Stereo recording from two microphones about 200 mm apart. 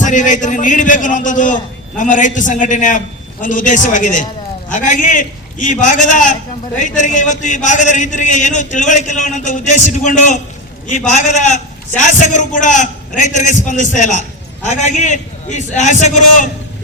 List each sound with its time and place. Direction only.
0.0 s a man's voice: 40° left (ahead or behind)